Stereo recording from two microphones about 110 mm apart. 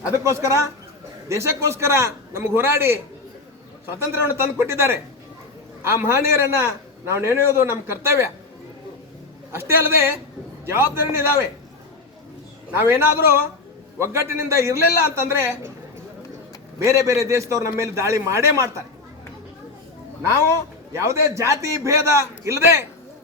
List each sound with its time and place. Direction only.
0.3 s a man's voice: 25° right (ahead or behind)
4.0 s a man's voice: 25° right (ahead or behind)
9.5 s a man's voice: 20° right (ahead or behind)
12.7 s a man's voice: 20° right (ahead or behind)
16.8 s a man's voice: 25° right (ahead or behind)
20.9 s a man's voice: 25° right (ahead or behind)